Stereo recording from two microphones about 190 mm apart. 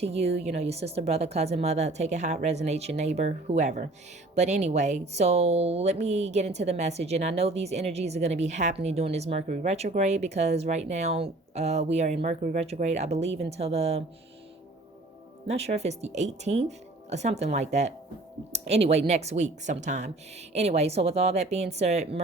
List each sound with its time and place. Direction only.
0.0 s speech: 35° right (ahead or behind)
15.4 s speech: 35° right (ahead or behind)